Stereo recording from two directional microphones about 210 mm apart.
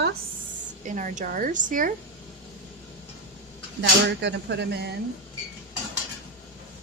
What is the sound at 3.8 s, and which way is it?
Speech, 55° right (ahead or behind).